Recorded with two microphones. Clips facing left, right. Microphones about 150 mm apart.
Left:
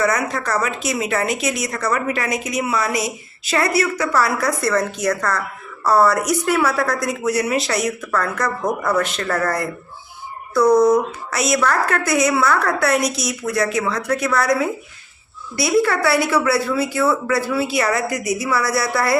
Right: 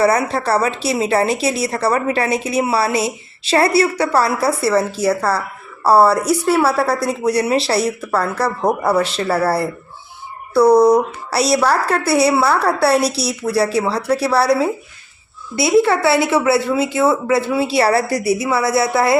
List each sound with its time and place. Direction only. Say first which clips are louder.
0.0 s a woman's voice: right 5 dB; 30° right (ahead or behind)